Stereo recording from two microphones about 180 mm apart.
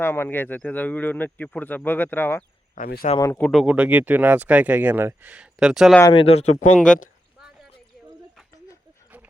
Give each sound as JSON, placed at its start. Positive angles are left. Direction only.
{"t": 0.0, "sound": "speech", "side_deg": 15}
{"t": 2.7, "sound": "speech", "side_deg": 55}
{"t": 3.2, "sound": "speech", "side_deg": 15}
{"t": 3.4, "sound": "speech", "side_deg": 0}
{"t": 6.1, "sound": "speech", "side_deg": 35}
{"t": 6.7, "sound": "speech", "side_deg": 0}
{"t": 7.3, "sound": "a sound", "side_deg": 0}
{"t": 9.0, "sound": "livestock", "side_deg": -10}